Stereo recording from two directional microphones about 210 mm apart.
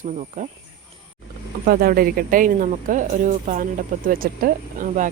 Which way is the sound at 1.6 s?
45° right (ahead or behind).